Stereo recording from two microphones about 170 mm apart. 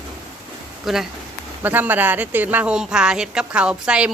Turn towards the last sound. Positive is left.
turn(degrees=-5)  # may be behind; listen again after turning